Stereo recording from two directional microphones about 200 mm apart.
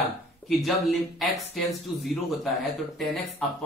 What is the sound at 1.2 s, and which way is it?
Speech, centre (ahead or behind).